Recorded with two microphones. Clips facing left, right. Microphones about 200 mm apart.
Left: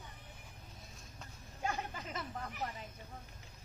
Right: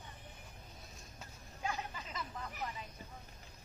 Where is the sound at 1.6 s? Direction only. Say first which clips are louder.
Left 2 dB; 45° left (ahead or behind).